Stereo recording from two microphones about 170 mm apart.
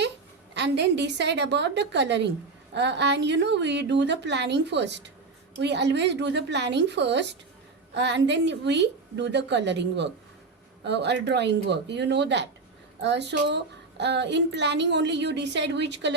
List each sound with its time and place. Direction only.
0.5 s a woman's voice: 90° right